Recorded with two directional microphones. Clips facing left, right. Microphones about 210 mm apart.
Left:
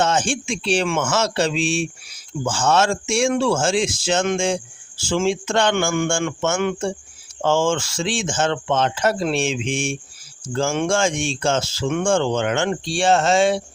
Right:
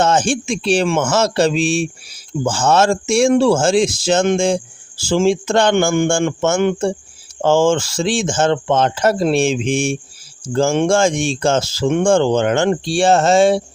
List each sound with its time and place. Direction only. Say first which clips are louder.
0.0 s speech: right 5 dB; 40° right (ahead or behind)